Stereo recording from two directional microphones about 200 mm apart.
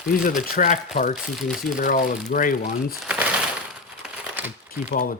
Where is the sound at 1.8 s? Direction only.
45° left (ahead or behind).